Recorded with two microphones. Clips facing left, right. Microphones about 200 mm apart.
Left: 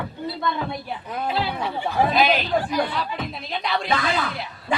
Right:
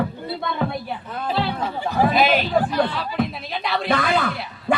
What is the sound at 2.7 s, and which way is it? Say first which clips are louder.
Speech: right 3 dB; 10° left (ahead or behind).